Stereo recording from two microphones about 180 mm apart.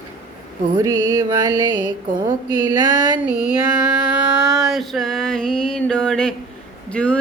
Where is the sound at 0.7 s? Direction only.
20° right (ahead or behind).